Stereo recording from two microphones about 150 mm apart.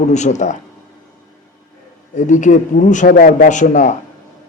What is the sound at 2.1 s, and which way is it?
A man's voice, 55° left (ahead or behind).